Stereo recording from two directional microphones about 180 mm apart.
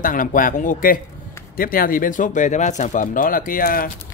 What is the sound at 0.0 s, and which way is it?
Speech, 50° left (ahead or behind).